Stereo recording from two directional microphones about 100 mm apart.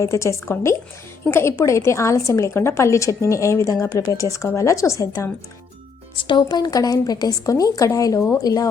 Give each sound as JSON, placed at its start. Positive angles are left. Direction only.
{"t": 0.0, "sound": "a woman's voice", "side_deg": 30}
{"t": 6.1, "sound": "a woman's voice", "side_deg": 55}